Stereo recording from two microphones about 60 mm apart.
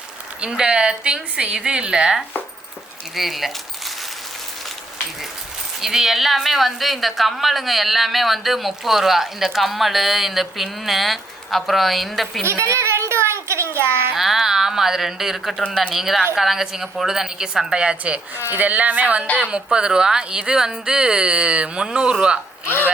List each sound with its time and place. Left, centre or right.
0.4 s a woman's voice: centre
5.8 s a woman's voice: centre
12.5 s a sound: right
14.1 s a woman's voice: centre
22.6 s speech: left